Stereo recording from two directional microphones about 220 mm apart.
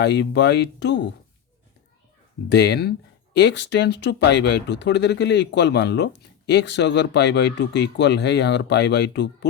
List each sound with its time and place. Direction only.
0.0 s speech: 50° left (ahead or behind)
2.5 s speech: 50° left (ahead or behind)